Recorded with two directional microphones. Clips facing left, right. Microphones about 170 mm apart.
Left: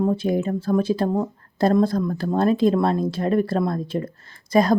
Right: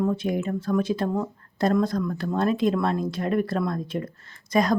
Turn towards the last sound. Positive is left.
turn(degrees=30)  # may be behind; listen again after turning